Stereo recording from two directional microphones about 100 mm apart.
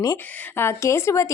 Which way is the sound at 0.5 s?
25° left (ahead or behind).